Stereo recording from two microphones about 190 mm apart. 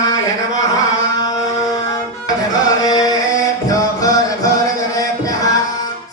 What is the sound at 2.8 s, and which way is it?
Carnatic music, 20° left (ahead or behind).